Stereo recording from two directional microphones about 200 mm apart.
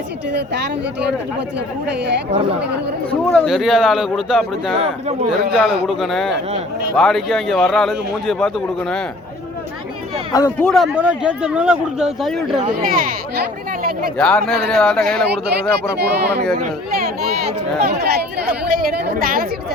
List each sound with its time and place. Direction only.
3.1 s a man's voice: 5° left (ahead or behind)
5.4 s a woman's voice: 50° right (ahead or behind)
5.8 s a man's voice: centre (ahead or behind)
10.3 s a man's voice: 15° left (ahead or behind)
10.7 s a man's voice: 5° right (ahead or behind)
12.8 s a woman's voice: 45° right (ahead or behind)
14.2 s a man's voice: 5° left (ahead or behind)
16.0 s speech: 55° right (ahead or behind)
17.8 s a woman's voice: 50° right (ahead or behind)